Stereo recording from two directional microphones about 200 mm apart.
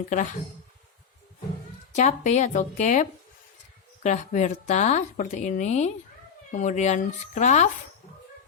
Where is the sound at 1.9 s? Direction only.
35° left (ahead or behind).